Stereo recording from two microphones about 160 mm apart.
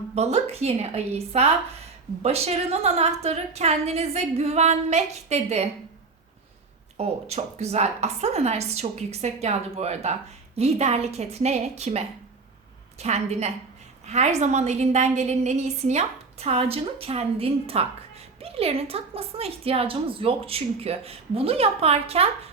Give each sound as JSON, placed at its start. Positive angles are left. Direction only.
{"t": 0.1, "sound": "a woman's voice", "side_deg": -40}
{"t": 6.9, "sound": "a woman's voice", "side_deg": -40}